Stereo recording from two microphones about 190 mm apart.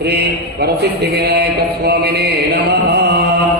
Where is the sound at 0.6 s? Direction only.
60° right (ahead or behind).